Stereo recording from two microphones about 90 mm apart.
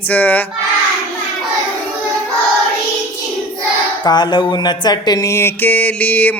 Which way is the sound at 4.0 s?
55° left (ahead or behind).